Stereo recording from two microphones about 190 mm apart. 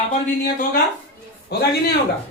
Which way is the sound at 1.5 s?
60° left (ahead or behind).